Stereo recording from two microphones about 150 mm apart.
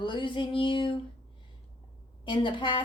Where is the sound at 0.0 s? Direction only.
35° left (ahead or behind).